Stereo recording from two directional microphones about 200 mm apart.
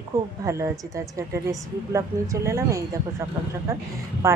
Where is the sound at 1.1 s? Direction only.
15° right (ahead or behind).